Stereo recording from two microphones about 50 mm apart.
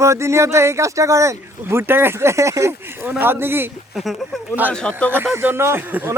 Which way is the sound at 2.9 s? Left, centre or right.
Right.